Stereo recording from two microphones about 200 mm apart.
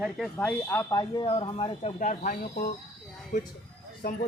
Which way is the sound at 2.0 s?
40° left (ahead or behind).